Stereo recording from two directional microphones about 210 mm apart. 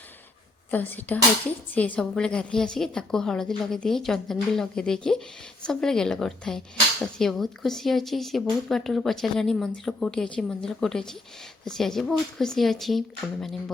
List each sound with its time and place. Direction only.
0.7 s a woman's voice: 10° left (ahead or behind)